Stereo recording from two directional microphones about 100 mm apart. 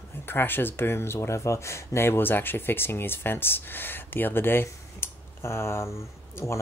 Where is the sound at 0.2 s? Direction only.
20° left (ahead or behind).